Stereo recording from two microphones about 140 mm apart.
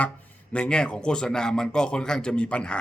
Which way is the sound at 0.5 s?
5° left (ahead or behind).